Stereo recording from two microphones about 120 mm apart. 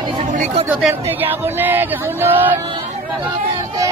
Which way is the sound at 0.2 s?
75° right (ahead or behind).